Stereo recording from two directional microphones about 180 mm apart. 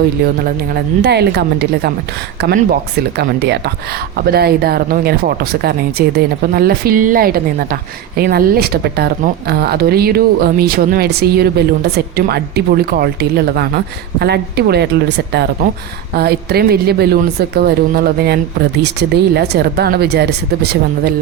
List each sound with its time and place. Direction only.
0.4 s speech: 60° right (ahead or behind)
4.2 s speech: 60° right (ahead or behind)
16.1 s speech: 60° right (ahead or behind)